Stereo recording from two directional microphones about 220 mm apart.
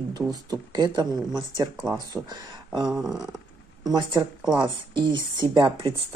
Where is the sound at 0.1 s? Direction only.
15° right (ahead or behind).